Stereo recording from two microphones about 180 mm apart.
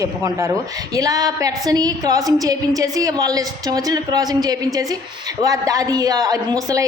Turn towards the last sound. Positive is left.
turn(degrees=-20)  # may be behind; listen again after turning